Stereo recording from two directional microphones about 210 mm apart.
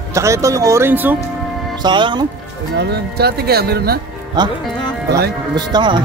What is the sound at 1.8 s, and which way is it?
Speech, 20° right (ahead or behind).